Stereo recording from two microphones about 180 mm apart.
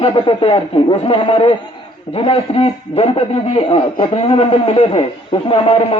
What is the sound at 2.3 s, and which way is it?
Speech, 30° left (ahead or behind).